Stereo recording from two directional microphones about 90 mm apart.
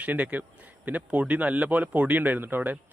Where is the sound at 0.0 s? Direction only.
15° right (ahead or behind).